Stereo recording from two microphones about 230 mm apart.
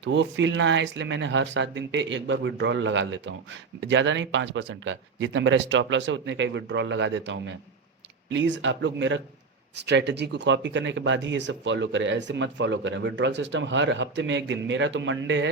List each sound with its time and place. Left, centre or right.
0.0 s speech: right